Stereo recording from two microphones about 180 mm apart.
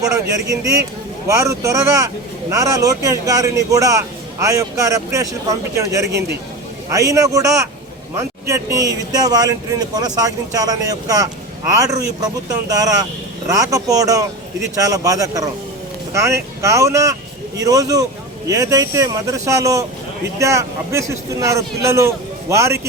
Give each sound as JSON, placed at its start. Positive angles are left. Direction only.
{"t": 0.0, "sound": "a man's voice", "side_deg": -20}